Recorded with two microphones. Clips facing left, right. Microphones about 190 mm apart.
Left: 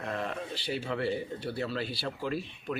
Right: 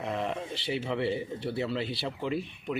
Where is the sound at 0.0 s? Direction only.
20° right (ahead or behind).